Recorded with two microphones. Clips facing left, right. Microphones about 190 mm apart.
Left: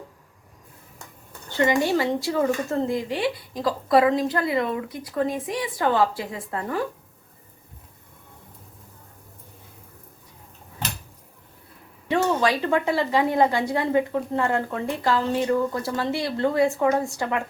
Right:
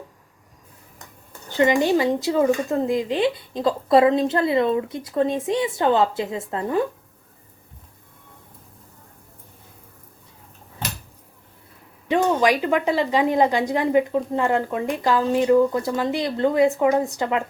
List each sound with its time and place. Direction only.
1.5 s speech: 15° right (ahead or behind)
12.0 s a woman's voice: 15° right (ahead or behind)